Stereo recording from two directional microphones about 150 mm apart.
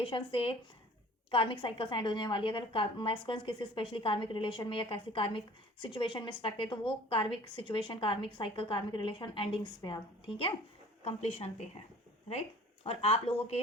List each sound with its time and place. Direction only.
0.0 s a woman's voice: 35° left (ahead or behind)